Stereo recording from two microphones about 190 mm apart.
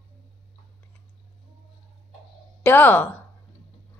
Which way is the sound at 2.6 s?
10° left (ahead or behind).